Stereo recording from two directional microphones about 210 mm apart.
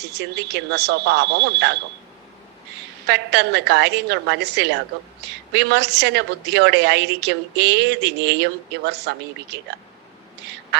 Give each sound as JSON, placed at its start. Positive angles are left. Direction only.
{"t": 0.0, "sound": "speech", "side_deg": -50}
{"t": 3.1, "sound": "a woman's voice", "side_deg": -55}